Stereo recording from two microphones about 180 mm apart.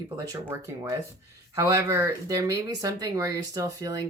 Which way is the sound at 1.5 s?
15° right (ahead or behind).